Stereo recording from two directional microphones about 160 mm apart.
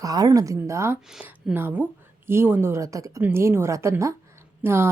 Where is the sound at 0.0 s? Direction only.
25° right (ahead or behind).